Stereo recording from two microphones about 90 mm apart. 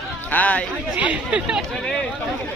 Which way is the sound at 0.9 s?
15° right (ahead or behind).